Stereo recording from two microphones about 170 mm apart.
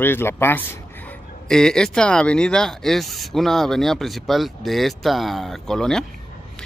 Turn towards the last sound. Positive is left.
turn(degrees=5)  # may be behind; listen again after turning